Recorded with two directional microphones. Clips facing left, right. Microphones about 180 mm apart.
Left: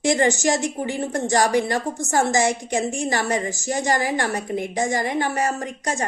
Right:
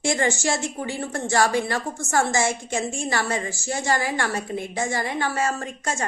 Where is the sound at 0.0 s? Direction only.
15° left (ahead or behind).